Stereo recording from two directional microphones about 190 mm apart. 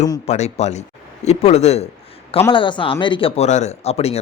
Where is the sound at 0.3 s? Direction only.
35° left (ahead or behind).